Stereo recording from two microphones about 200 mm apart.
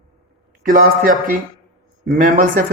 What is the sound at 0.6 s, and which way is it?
Speech, 45° right (ahead or behind).